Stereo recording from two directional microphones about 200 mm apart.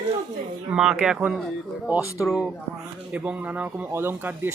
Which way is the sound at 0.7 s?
5° right (ahead or behind).